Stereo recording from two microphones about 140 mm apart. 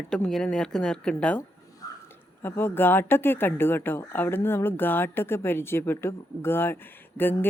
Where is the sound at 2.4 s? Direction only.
15° left (ahead or behind).